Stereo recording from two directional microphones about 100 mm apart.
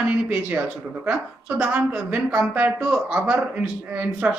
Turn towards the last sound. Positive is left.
turn(degrees=-15)  # may be behind; listen again after turning